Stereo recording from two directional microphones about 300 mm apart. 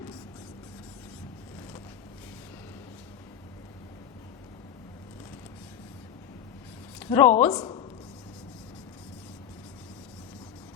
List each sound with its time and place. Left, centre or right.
7.0 s a woman's voice: centre